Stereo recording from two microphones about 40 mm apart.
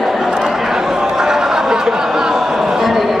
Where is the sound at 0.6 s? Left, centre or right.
Centre.